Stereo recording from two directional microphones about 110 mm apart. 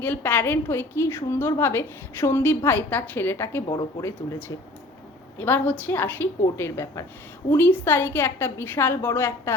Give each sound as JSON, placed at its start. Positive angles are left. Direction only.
{"t": 0.0, "sound": "a woman's voice", "side_deg": 20}